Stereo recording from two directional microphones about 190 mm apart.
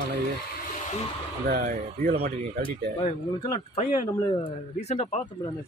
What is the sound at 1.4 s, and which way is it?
Speech, 50° right (ahead or behind).